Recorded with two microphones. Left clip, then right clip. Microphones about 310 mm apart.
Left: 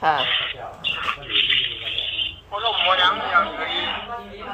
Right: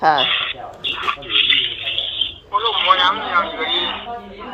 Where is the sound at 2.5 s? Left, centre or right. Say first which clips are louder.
Right 4 dB; centre.